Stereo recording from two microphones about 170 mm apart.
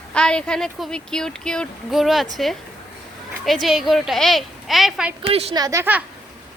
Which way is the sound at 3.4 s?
Centre (ahead or behind).